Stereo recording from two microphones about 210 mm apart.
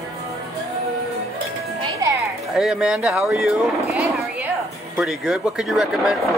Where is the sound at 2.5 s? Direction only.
5° right (ahead or behind).